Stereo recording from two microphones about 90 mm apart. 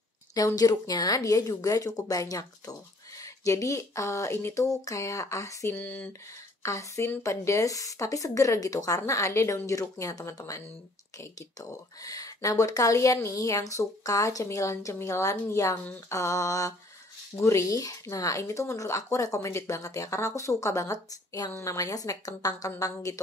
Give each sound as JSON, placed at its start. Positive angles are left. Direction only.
{"t": 0.6, "sound": "speech", "side_deg": 45}
{"t": 5.8, "sound": "speech", "side_deg": 15}
{"t": 6.6, "sound": "speech", "side_deg": 35}